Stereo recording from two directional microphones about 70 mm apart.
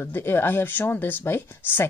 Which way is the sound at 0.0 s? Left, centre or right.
Left.